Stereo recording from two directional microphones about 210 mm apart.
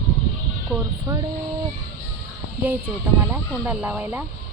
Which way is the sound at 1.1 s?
15° right (ahead or behind).